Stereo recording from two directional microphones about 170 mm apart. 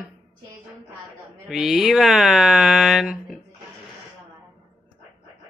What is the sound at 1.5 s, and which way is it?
Speech, 5° right (ahead or behind).